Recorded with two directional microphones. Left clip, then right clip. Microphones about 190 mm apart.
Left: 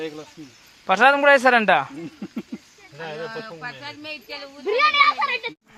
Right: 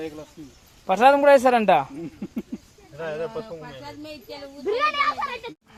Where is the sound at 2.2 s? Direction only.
20° left (ahead or behind).